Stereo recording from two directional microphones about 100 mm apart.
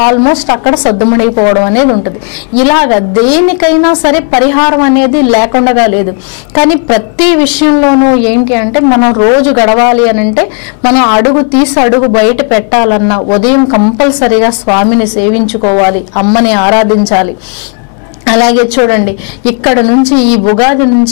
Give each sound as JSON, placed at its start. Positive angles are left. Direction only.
{"t": 0.0, "sound": "a woman's voice", "side_deg": 15}